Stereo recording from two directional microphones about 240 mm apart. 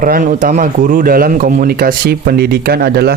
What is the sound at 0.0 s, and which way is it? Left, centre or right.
Speech, right.